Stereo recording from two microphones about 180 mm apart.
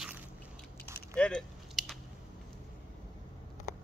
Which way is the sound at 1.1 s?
5° left (ahead or behind).